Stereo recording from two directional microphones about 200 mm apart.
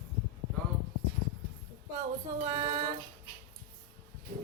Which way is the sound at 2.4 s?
20° right (ahead or behind).